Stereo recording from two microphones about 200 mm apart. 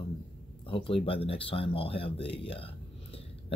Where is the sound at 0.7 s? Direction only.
25° left (ahead or behind).